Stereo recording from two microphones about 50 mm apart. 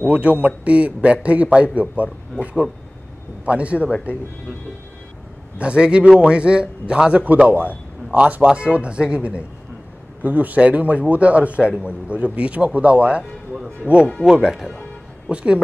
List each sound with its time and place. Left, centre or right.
0.0 s a man's voice: right
3.4 s a man's voice: right
5.6 s a man's voice: right
8.5 s a man's voice: right
10.2 s a man's voice: right
14.2 s a man's voice: centre